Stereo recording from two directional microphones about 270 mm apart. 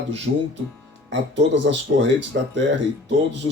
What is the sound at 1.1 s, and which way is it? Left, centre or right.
Speech, right.